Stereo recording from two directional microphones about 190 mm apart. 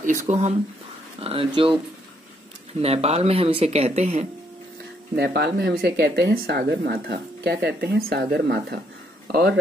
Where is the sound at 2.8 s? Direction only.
35° right (ahead or behind).